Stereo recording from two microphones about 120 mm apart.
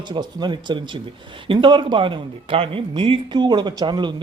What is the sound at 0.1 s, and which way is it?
Speech, 40° right (ahead or behind).